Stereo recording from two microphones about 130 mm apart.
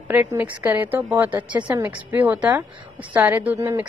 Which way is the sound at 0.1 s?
15° right (ahead or behind).